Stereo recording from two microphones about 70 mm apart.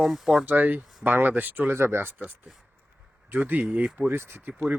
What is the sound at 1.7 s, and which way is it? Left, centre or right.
Speech, right.